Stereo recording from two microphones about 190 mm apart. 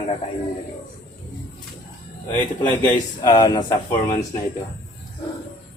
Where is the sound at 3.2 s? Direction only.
25° left (ahead or behind).